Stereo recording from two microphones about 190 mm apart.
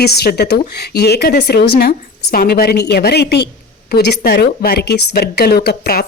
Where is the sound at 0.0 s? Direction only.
55° left (ahead or behind).